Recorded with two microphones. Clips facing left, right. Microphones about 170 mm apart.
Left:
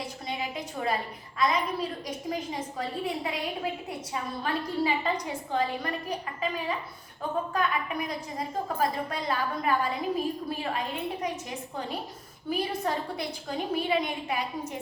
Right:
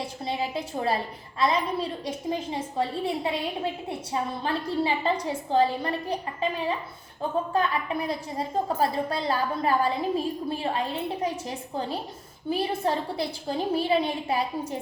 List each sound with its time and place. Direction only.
0.3 s a woman's voice: 30° right (ahead or behind)